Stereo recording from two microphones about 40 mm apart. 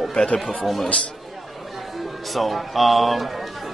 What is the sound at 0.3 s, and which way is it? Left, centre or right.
Speech, left.